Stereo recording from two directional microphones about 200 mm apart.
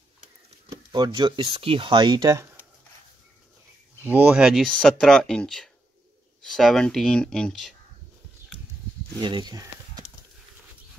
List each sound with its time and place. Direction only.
0.7 s speech: 20° right (ahead or behind)
4.0 s speech: 10° right (ahead or behind)
9.2 s speech: 20° right (ahead or behind)